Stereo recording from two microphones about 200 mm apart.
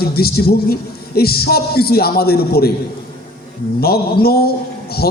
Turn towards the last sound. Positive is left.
turn(degrees=50)  # may be behind; listen again after turning